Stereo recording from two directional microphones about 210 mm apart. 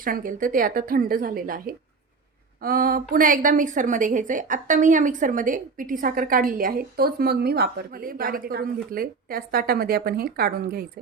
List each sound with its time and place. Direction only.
0.0 s a woman's voice: 40° right (ahead or behind)